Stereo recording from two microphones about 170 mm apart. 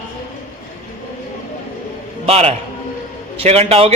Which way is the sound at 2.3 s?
35° right (ahead or behind).